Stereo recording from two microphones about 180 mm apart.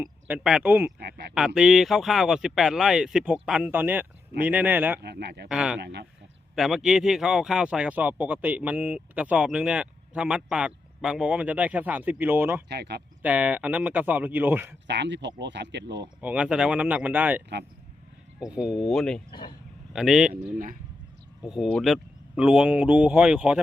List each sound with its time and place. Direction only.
0.0 s speech: 10° right (ahead or behind)
0.9 s speech: 60° right (ahead or behind)
1.3 s speech: 5° right (ahead or behind)
4.9 s speech: 65° right (ahead or behind)
5.5 s speech: 5° right (ahead or behind)
5.8 s speech: 70° right (ahead or behind)
6.6 s speech: centre (ahead or behind)
12.6 s speech: 65° right (ahead or behind)
13.2 s speech: 10° right (ahead or behind)
14.8 s speech: 75° right (ahead or behind)
16.2 s speech: 5° right (ahead or behind)
19.3 s speech: 25° left (ahead or behind)
19.9 s speech: 5° right (ahead or behind)